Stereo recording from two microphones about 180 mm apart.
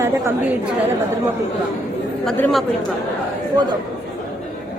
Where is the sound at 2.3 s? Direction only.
Centre (ahead or behind).